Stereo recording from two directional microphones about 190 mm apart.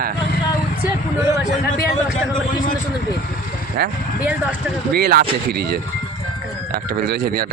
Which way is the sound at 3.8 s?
60° right (ahead or behind).